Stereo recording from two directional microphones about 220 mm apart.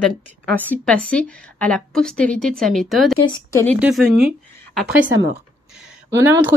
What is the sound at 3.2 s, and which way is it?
Speech, 20° left (ahead or behind).